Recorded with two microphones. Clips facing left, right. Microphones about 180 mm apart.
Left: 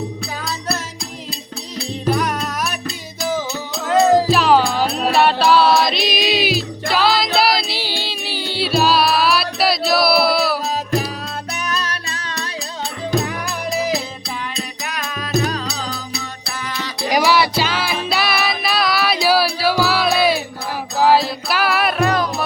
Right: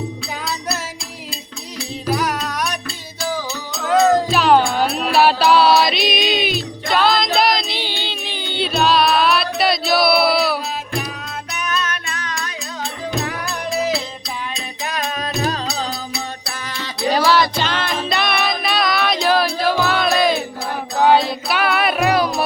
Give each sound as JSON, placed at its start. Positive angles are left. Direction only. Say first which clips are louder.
{"t": 2.1, "sound": "music", "louder": "even", "side_deg": 0}
{"t": 3.2, "sound": "music", "louder": "left 2 dB", "side_deg": 20}
{"t": 3.8, "sound": "music", "louder": "left 1 dB", "side_deg": 5}
{"t": 11.7, "sound": "music", "louder": "right 4 dB", "side_deg": 35}
{"t": 14.8, "sound": "music", "louder": "right 5 dB", "side_deg": -30}
{"t": 17.0, "sound": "music", "louder": "even", "side_deg": 10}
{"t": 22.0, "sound": "music", "louder": "right 1 dB", "side_deg": -10}